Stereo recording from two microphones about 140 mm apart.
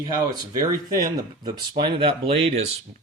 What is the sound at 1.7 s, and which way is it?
Speech, 40° right (ahead or behind).